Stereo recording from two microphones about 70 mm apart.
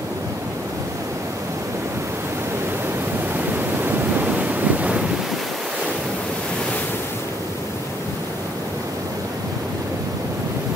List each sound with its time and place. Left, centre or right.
3.3 s waves: right